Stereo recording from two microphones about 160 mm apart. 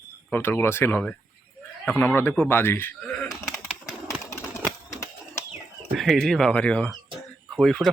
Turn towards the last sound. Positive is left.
turn(degrees=0)  # may be behind; listen again after turning